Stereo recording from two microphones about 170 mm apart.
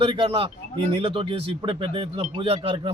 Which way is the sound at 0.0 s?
30° right (ahead or behind).